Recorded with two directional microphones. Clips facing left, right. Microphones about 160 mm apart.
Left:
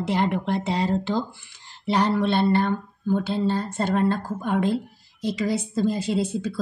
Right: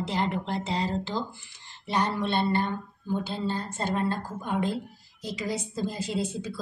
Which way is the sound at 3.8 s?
75° left (ahead or behind).